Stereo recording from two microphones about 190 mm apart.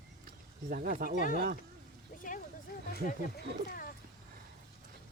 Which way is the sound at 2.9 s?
55° left (ahead or behind).